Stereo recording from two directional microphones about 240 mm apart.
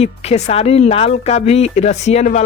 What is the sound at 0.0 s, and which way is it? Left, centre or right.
Speech, left.